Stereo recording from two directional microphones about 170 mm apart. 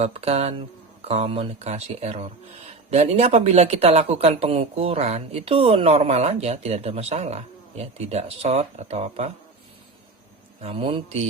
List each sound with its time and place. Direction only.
0.0 s speech: 35° right (ahead or behind)
10.6 s speech: 30° right (ahead or behind)